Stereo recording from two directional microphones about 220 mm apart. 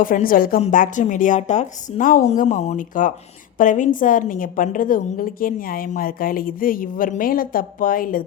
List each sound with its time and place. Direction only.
0.0 s a woman's voice: 40° left (ahead or behind)